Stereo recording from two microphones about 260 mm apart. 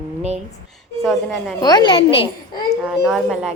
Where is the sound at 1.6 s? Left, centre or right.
Centre.